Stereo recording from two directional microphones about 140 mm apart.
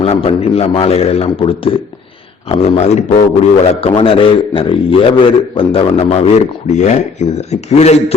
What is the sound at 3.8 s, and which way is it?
Speech, 45° left (ahead or behind).